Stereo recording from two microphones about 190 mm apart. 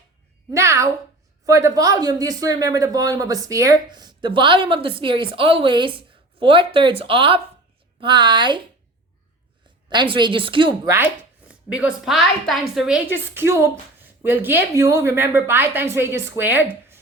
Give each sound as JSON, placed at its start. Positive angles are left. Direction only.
{"t": 0.5, "sound": "a woman's voice", "side_deg": -15}
{"t": 9.9, "sound": "speech", "side_deg": -25}
{"t": 10.8, "sound": "a woman's voice", "side_deg": -10}